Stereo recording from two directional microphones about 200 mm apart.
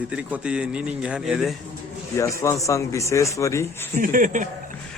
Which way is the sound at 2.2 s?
15° left (ahead or behind).